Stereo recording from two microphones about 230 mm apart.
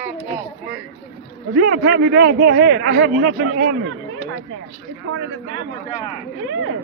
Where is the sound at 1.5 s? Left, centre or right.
Right.